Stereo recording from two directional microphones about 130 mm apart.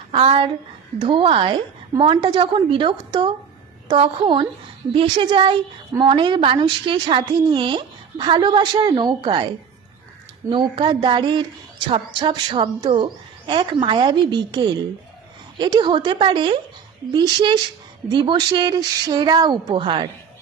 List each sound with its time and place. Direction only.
0.1 s a woman's voice: 45° right (ahead or behind)
10.5 s a woman's voice: 40° right (ahead or behind)